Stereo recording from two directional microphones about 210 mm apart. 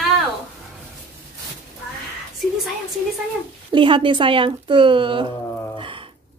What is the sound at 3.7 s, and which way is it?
Speech, 25° right (ahead or behind).